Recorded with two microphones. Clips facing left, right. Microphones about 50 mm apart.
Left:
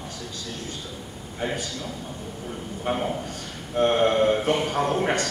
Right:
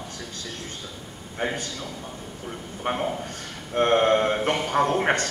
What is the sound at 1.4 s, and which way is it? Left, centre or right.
Speech, right.